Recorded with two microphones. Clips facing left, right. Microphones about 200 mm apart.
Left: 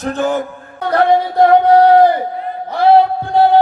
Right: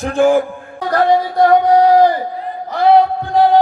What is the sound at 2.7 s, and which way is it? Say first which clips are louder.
Music: left 1 dB; 30° left (ahead or behind).